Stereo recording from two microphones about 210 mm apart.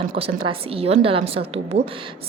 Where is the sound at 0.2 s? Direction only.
25° right (ahead or behind).